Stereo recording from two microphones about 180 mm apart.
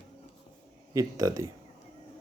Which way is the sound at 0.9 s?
20° right (ahead or behind).